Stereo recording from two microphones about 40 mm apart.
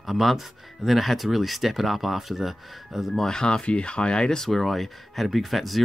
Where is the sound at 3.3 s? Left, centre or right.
Centre.